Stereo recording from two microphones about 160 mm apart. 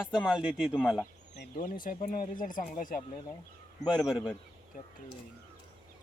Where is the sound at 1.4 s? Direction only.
60° left (ahead or behind).